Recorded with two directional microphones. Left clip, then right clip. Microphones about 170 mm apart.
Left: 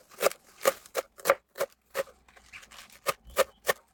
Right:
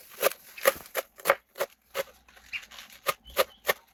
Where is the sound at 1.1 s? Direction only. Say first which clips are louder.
Even; 35° left (ahead or behind).